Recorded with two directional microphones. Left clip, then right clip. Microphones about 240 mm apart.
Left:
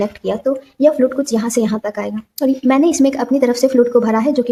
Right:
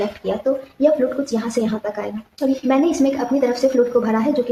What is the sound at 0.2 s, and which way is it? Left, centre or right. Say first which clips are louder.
A woman's voice: left 1 dB; left.